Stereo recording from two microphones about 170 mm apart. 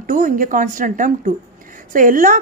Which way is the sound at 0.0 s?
50° right (ahead or behind).